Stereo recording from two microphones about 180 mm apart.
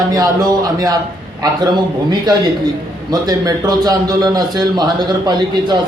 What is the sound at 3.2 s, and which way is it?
A man's voice, 20° right (ahead or behind).